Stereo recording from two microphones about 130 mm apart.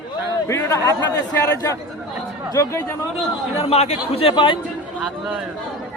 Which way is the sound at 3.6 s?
55° left (ahead or behind).